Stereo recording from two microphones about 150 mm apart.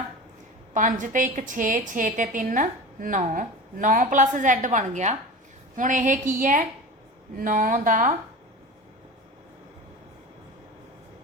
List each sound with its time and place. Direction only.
0.7 s a woman's voice: 60° right (ahead or behind)